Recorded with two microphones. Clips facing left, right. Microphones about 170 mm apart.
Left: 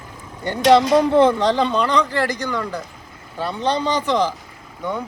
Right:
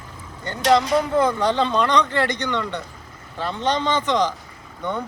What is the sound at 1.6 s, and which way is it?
Speech, 10° left (ahead or behind).